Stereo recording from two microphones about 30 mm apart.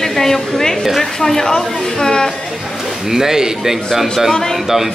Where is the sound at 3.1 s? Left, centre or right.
Centre.